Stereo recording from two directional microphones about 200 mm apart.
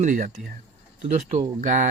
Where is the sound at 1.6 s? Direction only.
40° right (ahead or behind).